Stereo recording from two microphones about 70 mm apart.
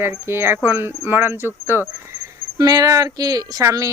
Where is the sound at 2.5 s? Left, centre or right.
Right.